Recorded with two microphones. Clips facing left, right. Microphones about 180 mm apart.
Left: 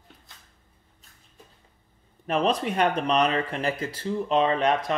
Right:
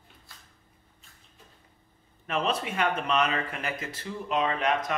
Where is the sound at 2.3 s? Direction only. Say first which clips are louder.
Left 5 dB; 35° left (ahead or behind).